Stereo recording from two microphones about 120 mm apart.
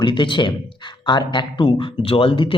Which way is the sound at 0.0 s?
40° left (ahead or behind).